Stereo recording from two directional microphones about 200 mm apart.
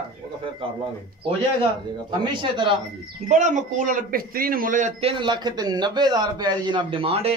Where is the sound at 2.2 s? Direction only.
25° right (ahead or behind).